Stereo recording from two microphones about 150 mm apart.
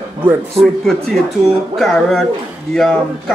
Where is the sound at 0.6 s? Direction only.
Centre (ahead or behind).